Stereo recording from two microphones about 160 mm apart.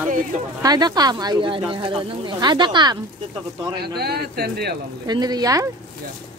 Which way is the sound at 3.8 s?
85° right.